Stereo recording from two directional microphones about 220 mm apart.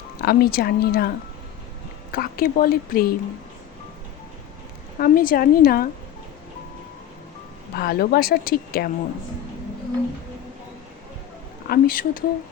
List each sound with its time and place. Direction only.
0.2 s speech: 45° left (ahead or behind)
2.1 s speech: 40° left (ahead or behind)
4.9 s a woman's voice: 40° left (ahead or behind)
7.8 s speech: 45° left (ahead or behind)
11.7 s a woman's voice: 40° left (ahead or behind)